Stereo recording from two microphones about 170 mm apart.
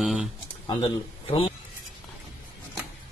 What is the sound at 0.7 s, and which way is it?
Speech, 30° left (ahead or behind).